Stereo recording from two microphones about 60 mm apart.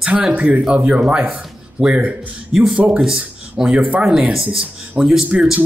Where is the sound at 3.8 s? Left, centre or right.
Right.